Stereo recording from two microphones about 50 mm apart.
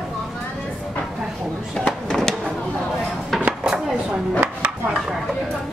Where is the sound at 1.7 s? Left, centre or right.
Centre.